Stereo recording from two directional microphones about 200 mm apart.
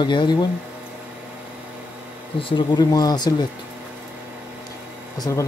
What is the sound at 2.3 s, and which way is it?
Speech, 25° left (ahead or behind).